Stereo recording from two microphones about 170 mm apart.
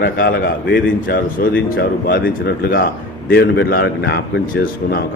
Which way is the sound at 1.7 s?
65° left (ahead or behind).